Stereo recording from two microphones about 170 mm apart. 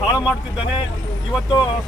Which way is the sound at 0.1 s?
5° right (ahead or behind).